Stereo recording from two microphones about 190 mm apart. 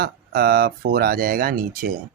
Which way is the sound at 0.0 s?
55° right (ahead or behind).